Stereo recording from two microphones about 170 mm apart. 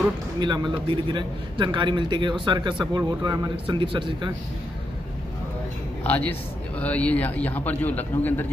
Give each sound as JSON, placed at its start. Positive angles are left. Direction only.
{"t": 0.4, "sound": "a man's voice", "side_deg": -25}
{"t": 6.0, "sound": "a man's voice", "side_deg": 10}